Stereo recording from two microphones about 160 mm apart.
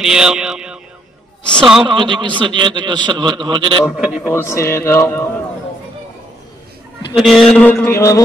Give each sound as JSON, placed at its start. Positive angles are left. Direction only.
{"t": 0.0, "sound": "music", "side_deg": -5}
{"t": 1.8, "sound": "a man's voice", "side_deg": -30}
{"t": 3.8, "sound": "a man's voice", "side_deg": -5}
{"t": 4.3, "sound": "mantra", "side_deg": 15}
{"t": 7.2, "sound": "mantra", "side_deg": 0}